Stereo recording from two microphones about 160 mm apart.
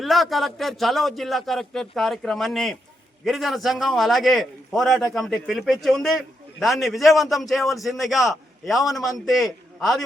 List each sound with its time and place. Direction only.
0.0 s a man's voice: centre (ahead or behind)